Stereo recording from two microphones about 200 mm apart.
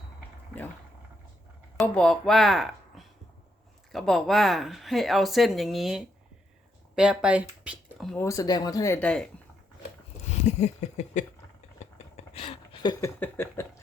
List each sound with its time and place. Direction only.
1.8 s speech: centre (ahead or behind)
8.2 s speech: 15° left (ahead or behind)
10.2 s speech: 35° left (ahead or behind)
11.8 s a sound: 30° left (ahead or behind)
13.1 s speech: 10° left (ahead or behind)